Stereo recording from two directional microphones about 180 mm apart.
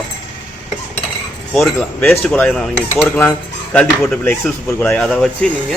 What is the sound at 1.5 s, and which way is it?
Speech, centre (ahead or behind).